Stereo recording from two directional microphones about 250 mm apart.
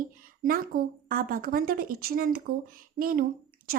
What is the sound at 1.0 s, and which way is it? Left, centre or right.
A woman's voice, right.